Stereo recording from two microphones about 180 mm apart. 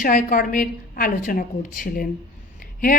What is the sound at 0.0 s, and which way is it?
A woman's voice, 50° left (ahead or behind).